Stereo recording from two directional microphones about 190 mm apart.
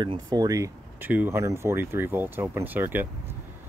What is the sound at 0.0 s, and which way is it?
Speech, 25° right (ahead or behind).